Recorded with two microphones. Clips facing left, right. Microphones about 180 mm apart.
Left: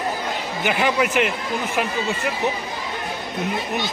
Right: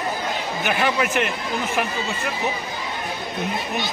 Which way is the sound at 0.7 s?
15° left (ahead or behind).